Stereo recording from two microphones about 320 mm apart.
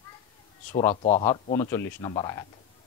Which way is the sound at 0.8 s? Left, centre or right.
Centre.